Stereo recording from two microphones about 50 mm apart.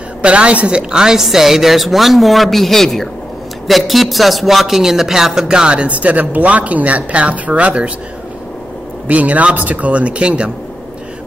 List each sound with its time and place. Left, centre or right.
0.2 s a woman's voice: right
9.0 s speech: right